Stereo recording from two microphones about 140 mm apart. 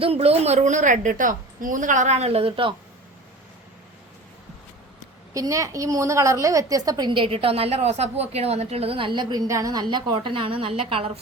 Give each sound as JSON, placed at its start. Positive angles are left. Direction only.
{"t": 0.0, "sound": "a woman's voice", "side_deg": -45}
{"t": 5.3, "sound": "a woman's voice", "side_deg": -25}